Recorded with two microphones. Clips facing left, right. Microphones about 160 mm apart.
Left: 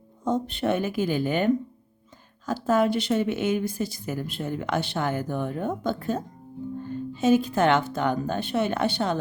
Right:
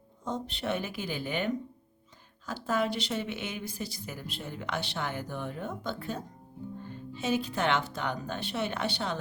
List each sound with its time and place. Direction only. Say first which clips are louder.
0.3 s speech: left 8 dB; 50° left (ahead or behind)